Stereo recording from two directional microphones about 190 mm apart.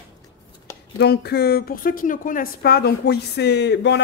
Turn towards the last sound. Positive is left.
turn(degrees=65)  # may be behind; listen again after turning